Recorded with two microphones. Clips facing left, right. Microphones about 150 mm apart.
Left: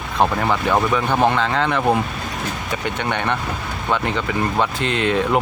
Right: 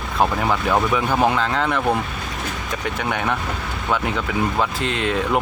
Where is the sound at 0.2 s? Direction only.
Centre (ahead or behind).